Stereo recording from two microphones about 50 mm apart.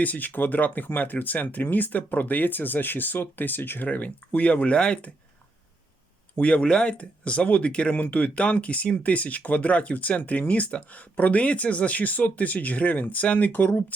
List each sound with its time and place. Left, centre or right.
0.0 s speech: left
6.4 s speech: left